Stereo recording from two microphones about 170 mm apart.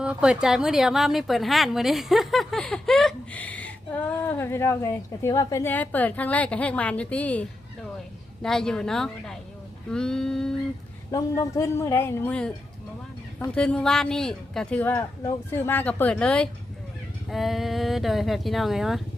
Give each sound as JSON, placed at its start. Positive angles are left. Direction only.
{"t": 0.0, "sound": "a woman's voice", "side_deg": -5}
{"t": 11.1, "sound": "a woman's voice", "side_deg": 20}